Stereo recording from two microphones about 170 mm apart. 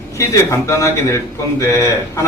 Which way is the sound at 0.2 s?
15° left (ahead or behind).